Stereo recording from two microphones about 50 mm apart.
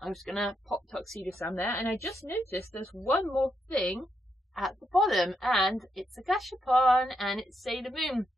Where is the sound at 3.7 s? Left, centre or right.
Left.